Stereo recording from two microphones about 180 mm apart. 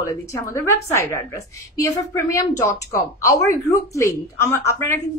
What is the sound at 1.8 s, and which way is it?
Speech, 20° left (ahead or behind).